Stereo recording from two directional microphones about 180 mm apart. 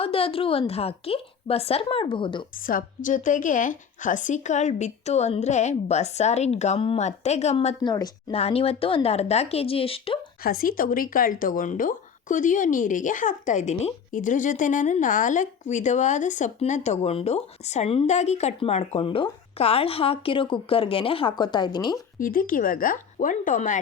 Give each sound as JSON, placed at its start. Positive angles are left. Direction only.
{"t": 0.0, "sound": "speech", "side_deg": 30}
{"t": 2.6, "sound": "speech", "side_deg": 50}
{"t": 7.8, "sound": "a woman's voice", "side_deg": 20}
{"t": 8.3, "sound": "speech", "side_deg": 35}
{"t": 10.4, "sound": "speech", "side_deg": 55}
{"t": 22.2, "sound": "speech", "side_deg": 50}